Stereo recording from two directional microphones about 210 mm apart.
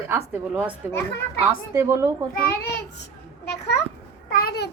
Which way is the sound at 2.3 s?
50° left (ahead or behind).